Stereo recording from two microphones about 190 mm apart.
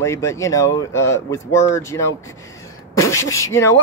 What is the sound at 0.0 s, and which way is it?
Speech, 15° left (ahead or behind).